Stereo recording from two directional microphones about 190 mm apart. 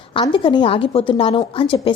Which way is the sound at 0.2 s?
25° left (ahead or behind).